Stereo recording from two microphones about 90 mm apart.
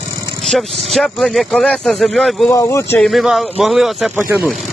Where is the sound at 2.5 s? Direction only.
35° left (ahead or behind).